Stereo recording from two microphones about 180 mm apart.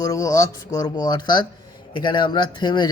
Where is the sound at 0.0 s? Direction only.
20° left (ahead or behind).